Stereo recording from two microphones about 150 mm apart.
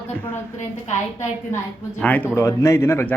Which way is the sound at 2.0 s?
10° left (ahead or behind).